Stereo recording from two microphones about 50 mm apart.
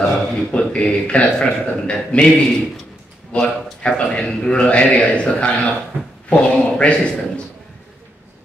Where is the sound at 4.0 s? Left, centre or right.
Centre.